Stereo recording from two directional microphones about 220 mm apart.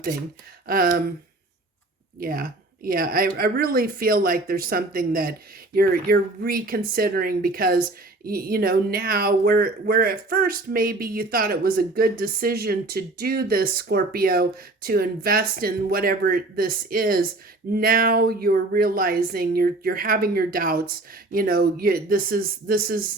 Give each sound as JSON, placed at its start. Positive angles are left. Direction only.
{"t": 0.7, "sound": "speech", "side_deg": -40}
{"t": 2.2, "sound": "speech", "side_deg": -40}